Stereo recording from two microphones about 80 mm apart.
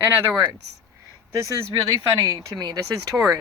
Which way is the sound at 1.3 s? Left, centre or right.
Right.